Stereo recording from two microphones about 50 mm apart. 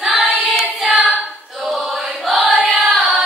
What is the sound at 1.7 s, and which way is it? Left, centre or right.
Choir, centre.